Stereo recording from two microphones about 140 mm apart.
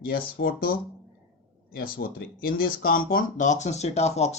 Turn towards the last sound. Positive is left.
turn(degrees=50)  # may be behind; listen again after turning